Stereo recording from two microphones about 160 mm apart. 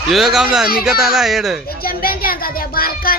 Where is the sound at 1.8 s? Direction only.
65° left (ahead or behind).